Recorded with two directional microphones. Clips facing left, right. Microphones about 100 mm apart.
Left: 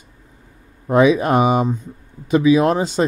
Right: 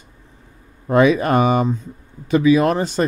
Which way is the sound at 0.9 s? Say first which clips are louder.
Left 1 dB; 20° left (ahead or behind).